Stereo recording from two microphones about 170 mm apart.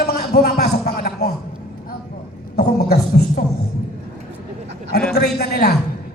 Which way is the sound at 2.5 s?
70° left (ahead or behind).